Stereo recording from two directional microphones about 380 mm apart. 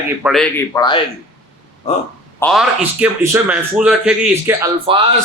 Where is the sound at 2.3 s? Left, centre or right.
Centre.